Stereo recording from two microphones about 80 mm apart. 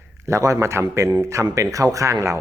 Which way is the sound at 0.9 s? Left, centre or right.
Right.